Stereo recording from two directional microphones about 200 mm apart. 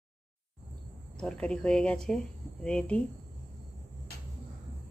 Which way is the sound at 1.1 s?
5° left (ahead or behind).